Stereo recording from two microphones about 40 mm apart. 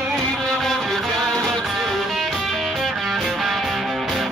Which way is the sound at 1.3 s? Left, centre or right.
Centre.